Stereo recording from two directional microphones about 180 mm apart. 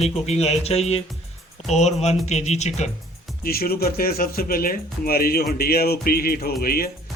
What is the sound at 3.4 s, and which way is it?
Speech, 55° left (ahead or behind).